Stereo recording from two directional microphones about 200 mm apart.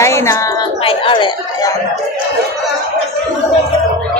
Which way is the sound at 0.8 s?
25° left (ahead or behind).